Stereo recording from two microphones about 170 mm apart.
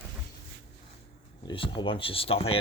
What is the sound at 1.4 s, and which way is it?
Speech, 30° left (ahead or behind).